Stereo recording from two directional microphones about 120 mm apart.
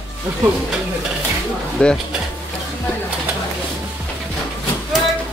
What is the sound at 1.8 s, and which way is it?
Speech, 10° left (ahead or behind).